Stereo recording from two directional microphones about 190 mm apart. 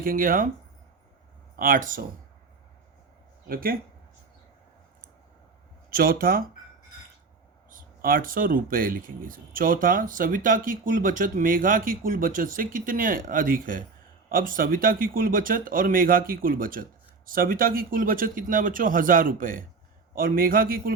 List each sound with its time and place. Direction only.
0.0 s speech: 45° right (ahead or behind)
1.5 s speech: 45° right (ahead or behind)
3.5 s speech: 50° right (ahead or behind)
5.9 s speech: 50° right (ahead or behind)
7.7 s speech: 50° right (ahead or behind)